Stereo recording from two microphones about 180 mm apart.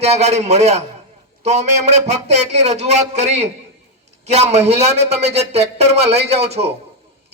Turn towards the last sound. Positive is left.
turn(degrees=-35)  # may be behind; listen again after turning